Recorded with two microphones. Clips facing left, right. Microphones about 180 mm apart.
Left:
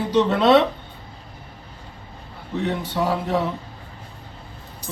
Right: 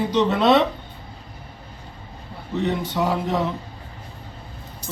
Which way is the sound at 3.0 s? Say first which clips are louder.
Left 2 dB; 5° left (ahead or behind).